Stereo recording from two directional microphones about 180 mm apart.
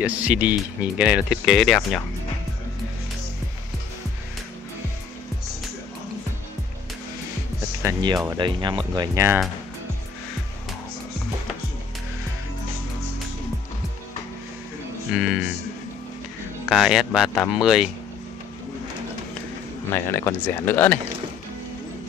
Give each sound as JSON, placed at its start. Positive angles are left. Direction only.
{"t": 0.0, "sound": "speech", "side_deg": -10}
{"t": 7.8, "sound": "speech", "side_deg": -25}
{"t": 15.1, "sound": "speech", "side_deg": 0}
{"t": 16.6, "sound": "speech", "side_deg": 0}
{"t": 19.9, "sound": "speech", "side_deg": 15}